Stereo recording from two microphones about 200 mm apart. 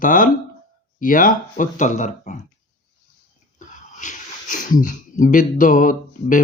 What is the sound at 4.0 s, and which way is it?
Speech, 40° left (ahead or behind).